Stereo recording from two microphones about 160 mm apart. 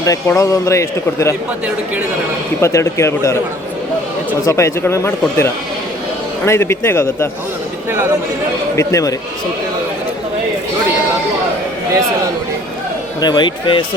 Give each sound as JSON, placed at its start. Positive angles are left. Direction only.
{"t": 0.0, "sound": "a man's voice", "side_deg": 20}
{"t": 2.6, "sound": "speech", "side_deg": 20}
{"t": 7.9, "sound": "speech", "side_deg": -15}
{"t": 8.7, "sound": "speech", "side_deg": 20}
{"t": 13.1, "sound": "a man's voice", "side_deg": 25}